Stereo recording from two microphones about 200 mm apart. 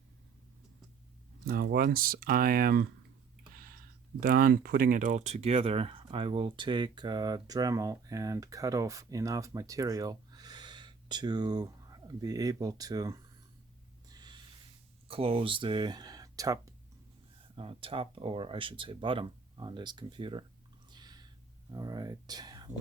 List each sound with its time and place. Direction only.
1.5 s speech: 45° right (ahead or behind)
4.2 s speech: 45° right (ahead or behind); by 13.1 s 20° right (ahead or behind)
14.1 s a sound: 20° right (ahead or behind)
15.0 s speech: 30° right (ahead or behind)
20.9 s a sound: 20° right (ahead or behind)
21.7 s speech: 20° right (ahead or behind)